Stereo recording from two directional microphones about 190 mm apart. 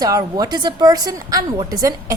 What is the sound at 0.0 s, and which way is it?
A woman's voice, 20° right (ahead or behind).